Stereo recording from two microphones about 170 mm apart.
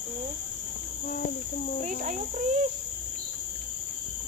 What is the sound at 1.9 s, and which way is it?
Speech, 50° right (ahead or behind).